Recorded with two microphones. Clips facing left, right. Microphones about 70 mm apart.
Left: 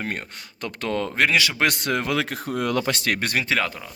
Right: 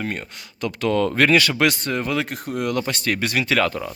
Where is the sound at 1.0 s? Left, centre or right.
Centre.